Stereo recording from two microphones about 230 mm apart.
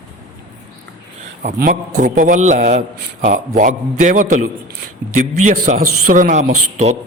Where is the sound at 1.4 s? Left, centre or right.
Right.